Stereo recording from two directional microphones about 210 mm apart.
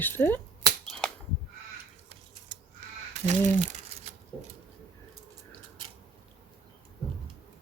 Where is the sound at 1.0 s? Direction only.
5° left (ahead or behind).